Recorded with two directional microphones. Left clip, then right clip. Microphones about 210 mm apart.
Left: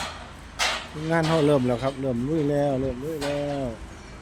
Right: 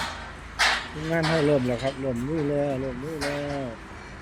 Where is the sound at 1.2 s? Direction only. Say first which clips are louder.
Left 1 dB; 25° left (ahead or behind).